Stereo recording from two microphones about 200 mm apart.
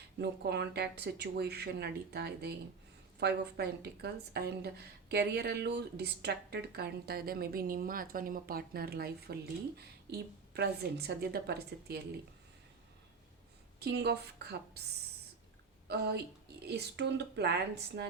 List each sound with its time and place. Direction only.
0.2 s a woman's voice: 55° right (ahead or behind)
13.7 s speech: 55° right (ahead or behind)
15.9 s a woman's voice: 55° right (ahead or behind)